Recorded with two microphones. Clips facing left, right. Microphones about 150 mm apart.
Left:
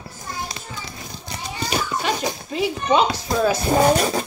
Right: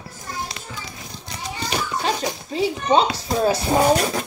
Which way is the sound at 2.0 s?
30° right (ahead or behind).